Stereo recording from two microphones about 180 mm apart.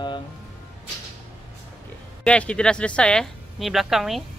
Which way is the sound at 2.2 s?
5° left (ahead or behind).